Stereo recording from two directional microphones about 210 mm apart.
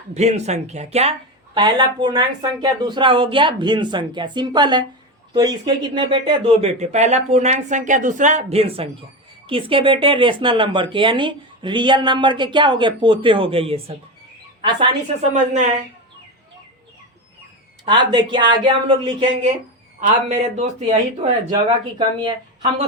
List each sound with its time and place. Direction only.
0.1 s speech: 30° right (ahead or behind)
17.8 s speech: 20° right (ahead or behind)
20.0 s speech: 30° right (ahead or behind)